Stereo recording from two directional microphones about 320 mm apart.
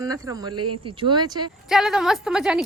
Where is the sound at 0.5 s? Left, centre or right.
Right.